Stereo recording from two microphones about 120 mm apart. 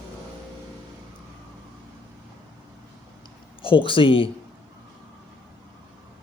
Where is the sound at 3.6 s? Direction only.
45° left (ahead or behind).